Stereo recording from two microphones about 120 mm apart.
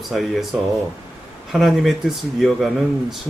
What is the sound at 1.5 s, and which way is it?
Speech, centre (ahead or behind).